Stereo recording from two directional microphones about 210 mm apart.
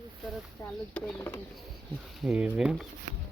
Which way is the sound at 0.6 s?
10° left (ahead or behind).